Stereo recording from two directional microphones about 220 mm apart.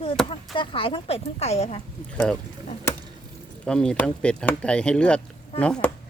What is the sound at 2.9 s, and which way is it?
Chop, 10° left (ahead or behind).